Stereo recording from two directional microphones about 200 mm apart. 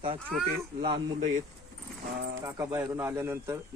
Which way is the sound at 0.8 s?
25° right (ahead or behind).